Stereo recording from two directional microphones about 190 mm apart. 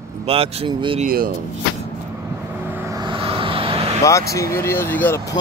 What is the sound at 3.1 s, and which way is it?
Vehicle, 30° right (ahead or behind).